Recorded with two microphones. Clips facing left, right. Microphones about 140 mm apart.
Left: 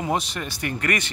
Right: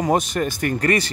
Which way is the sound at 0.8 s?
35° right (ahead or behind).